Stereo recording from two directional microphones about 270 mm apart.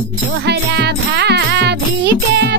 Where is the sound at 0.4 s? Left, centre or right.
Right.